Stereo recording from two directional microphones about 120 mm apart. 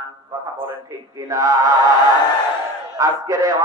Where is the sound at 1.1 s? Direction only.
30° right (ahead or behind).